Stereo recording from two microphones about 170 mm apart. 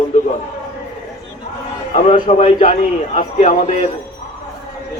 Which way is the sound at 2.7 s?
50° left (ahead or behind).